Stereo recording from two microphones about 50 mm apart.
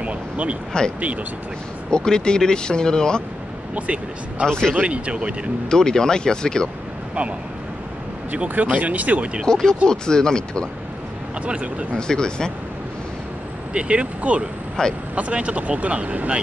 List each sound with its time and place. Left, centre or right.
0.0 s a sound: right
1.9 s speech: centre
3.7 s speech: right
4.5 s speech: centre
4.7 s speech: right
5.7 s speech: centre
8.3 s speech: right
9.5 s speech: centre
11.4 s speech: right
11.9 s speech: centre
13.7 s speech: right
14.8 s speech: centre
15.1 s speech: right